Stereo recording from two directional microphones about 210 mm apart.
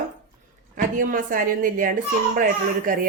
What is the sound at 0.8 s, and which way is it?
Speech, 40° right (ahead or behind).